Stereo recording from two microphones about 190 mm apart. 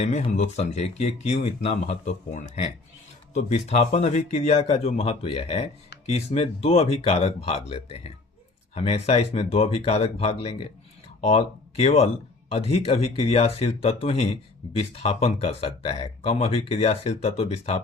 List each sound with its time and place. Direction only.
0.0 s speech: 35° left (ahead or behind)